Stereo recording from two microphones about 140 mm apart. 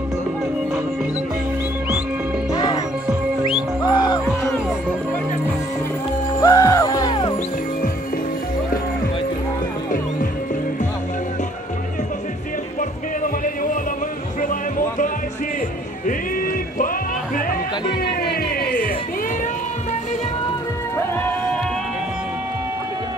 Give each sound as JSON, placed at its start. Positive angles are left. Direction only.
{"t": 2.5, "sound": "music", "side_deg": 30}
{"t": 3.8, "sound": "music", "side_deg": 30}
{"t": 6.4, "sound": "music", "side_deg": 25}
{"t": 14.4, "sound": "music", "side_deg": 70}
{"t": 18.2, "sound": "music", "side_deg": 90}
{"t": 21.0, "sound": "music", "side_deg": 15}